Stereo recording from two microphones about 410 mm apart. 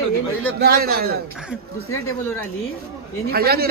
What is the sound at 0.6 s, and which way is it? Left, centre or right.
Speech, right.